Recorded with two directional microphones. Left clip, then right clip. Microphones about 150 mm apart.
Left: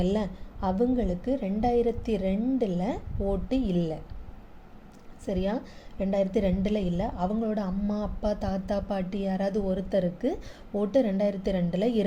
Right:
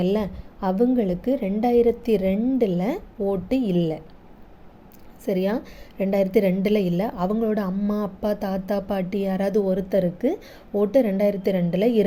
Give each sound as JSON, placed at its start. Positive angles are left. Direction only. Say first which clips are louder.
{"t": 0.0, "sound": "a woman's voice", "louder": "right 5 dB", "side_deg": -20}
{"t": 5.2, "sound": "a woman's voice", "louder": "right 6 dB", "side_deg": -35}